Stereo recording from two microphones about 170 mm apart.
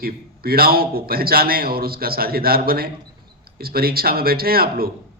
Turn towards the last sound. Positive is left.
turn(degrees=-60)  # may be behind; listen again after turning